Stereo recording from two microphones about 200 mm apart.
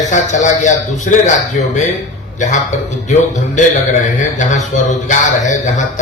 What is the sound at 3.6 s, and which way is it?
A man's voice, 40° left (ahead or behind).